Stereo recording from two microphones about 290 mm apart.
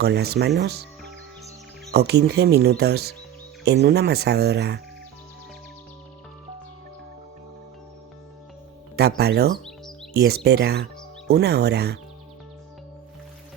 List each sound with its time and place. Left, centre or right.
0.0 s speech: right
1.9 s speech: right
9.0 s speech: right